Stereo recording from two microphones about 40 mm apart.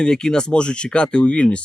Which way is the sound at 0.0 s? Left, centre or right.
Centre.